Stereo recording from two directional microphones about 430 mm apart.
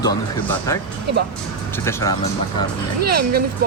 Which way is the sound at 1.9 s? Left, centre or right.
Centre.